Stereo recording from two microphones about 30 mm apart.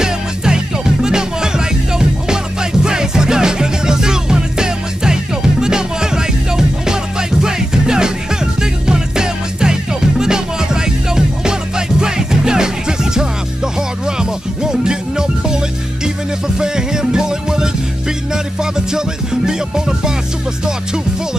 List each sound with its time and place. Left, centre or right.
0.0 s music: right